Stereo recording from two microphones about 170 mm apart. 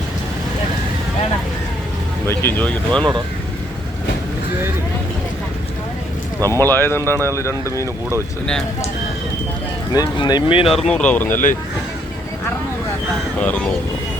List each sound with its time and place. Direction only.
2.2 s speech: 15° left (ahead or behind)
6.5 s speech: 15° left (ahead or behind)
9.9 s speech: 25° left (ahead or behind)
10.7 s speech: 5° left (ahead or behind)
13.4 s speech: 10° left (ahead or behind)